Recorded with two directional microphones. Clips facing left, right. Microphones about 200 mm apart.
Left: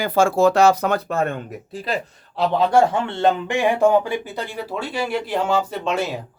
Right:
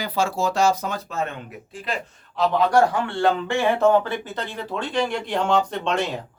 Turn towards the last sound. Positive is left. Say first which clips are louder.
# left 1 dB
turn(degrees=5)  # may be behind; listen again after turning